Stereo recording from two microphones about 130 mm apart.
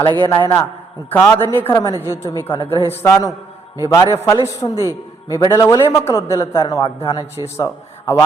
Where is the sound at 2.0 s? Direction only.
20° left (ahead or behind).